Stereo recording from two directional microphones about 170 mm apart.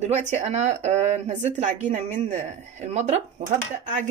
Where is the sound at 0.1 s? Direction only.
40° right (ahead or behind).